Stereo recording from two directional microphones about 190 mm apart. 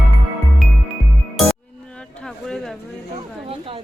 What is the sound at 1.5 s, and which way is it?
Music, 5° left (ahead or behind).